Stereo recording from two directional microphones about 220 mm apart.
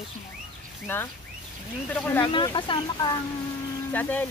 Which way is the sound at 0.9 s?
10° left (ahead or behind).